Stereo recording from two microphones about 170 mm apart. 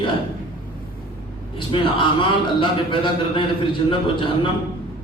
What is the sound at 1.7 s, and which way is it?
A man's voice, 30° left (ahead or behind).